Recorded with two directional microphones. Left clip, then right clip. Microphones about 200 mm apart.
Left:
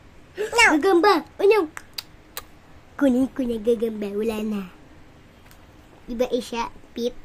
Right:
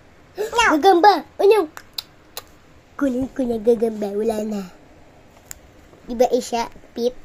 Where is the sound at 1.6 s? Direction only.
15° left (ahead or behind).